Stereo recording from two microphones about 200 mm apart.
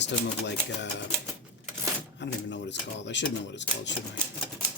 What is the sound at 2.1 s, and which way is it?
Speech, 60° left (ahead or behind).